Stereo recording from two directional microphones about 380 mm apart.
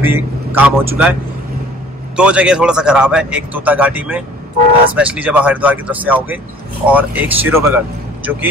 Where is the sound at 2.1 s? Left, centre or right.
Centre.